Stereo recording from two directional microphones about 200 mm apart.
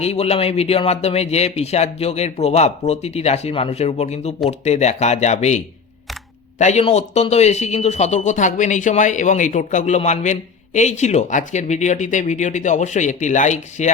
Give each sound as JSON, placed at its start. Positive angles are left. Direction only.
{"t": 0.0, "sound": "a man's voice", "side_deg": 30}